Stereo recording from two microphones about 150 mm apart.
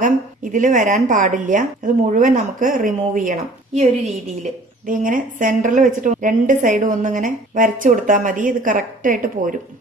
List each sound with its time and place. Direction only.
0.0 s a woman's voice: 60° right (ahead or behind)